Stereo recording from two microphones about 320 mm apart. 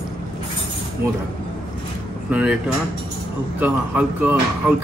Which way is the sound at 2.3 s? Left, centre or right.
Centre.